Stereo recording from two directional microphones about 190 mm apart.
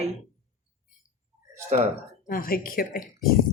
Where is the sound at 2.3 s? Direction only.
50° left (ahead or behind).